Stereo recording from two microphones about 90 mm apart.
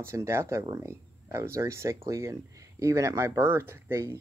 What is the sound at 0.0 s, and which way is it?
Speech, 30° right (ahead or behind).